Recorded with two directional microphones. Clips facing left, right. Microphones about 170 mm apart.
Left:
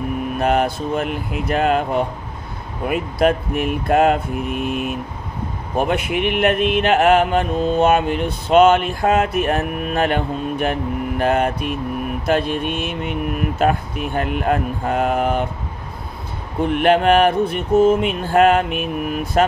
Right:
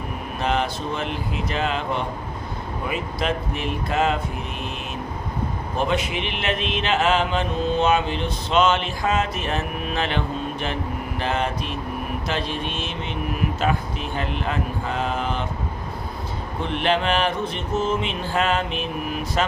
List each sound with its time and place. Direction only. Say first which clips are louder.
0.4 s mantra: left 5 dB; 50° left (ahead or behind)
16.6 s mantra: left 8 dB; 50° left (ahead or behind)